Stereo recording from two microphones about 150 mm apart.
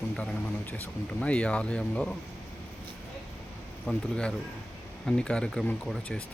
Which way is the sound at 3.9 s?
5° left (ahead or behind).